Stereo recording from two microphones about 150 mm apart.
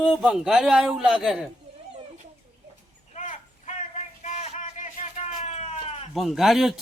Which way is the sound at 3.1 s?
50° left (ahead or behind).